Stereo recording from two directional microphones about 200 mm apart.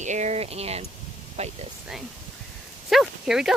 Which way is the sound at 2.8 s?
Centre (ahead or behind).